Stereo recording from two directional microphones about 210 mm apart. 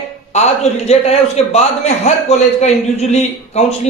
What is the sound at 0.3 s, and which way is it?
A man's voice, 30° left (ahead or behind).